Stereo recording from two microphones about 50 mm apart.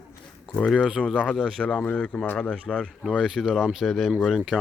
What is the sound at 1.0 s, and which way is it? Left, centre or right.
Speech, left.